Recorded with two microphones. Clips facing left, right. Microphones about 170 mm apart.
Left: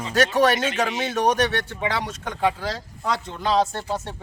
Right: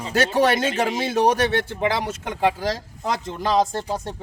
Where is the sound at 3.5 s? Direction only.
15° right (ahead or behind).